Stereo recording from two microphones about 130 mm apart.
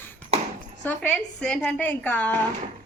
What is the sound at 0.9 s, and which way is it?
A woman's voice, 15° left (ahead or behind).